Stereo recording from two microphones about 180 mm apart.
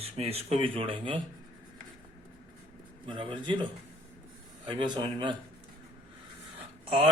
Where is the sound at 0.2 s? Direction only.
35° right (ahead or behind).